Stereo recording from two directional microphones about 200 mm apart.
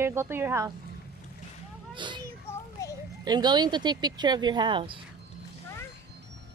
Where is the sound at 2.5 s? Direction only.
15° left (ahead or behind).